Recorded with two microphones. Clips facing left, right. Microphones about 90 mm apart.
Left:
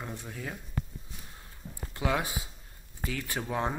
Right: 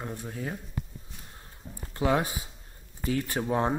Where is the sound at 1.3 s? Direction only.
20° right (ahead or behind).